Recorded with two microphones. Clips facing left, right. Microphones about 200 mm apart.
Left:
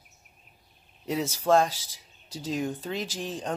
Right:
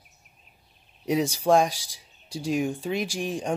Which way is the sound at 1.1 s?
15° right (ahead or behind).